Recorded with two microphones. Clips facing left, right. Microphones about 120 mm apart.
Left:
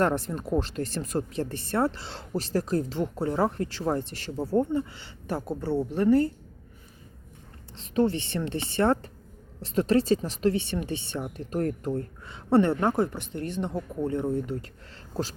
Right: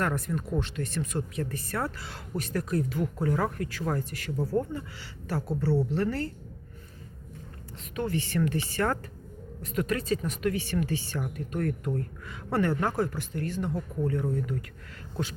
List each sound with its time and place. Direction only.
0.0 s speech: 30° left (ahead or behind)
7.8 s a man's voice: 30° left (ahead or behind)